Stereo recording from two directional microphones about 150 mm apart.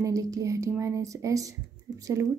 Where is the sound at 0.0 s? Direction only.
25° right (ahead or behind).